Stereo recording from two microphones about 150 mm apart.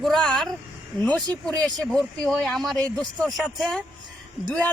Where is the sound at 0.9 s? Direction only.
25° right (ahead or behind).